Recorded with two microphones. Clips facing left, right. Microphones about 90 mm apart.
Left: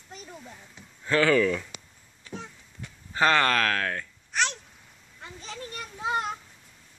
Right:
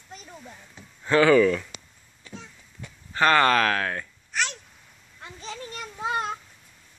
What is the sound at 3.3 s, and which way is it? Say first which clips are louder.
Speech: right 6 dB; 10° right (ahead or behind).